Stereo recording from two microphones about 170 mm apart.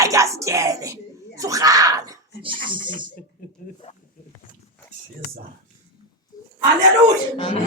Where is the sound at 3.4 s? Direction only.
50° left (ahead or behind).